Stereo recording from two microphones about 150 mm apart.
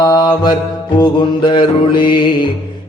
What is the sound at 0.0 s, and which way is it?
Music, 30° left (ahead or behind).